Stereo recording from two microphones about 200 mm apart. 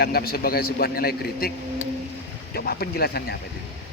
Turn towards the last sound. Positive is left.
turn(degrees=50)  # may be behind; listen again after turning